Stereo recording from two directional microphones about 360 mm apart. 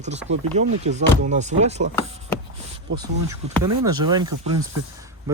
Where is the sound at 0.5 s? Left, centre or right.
Centre.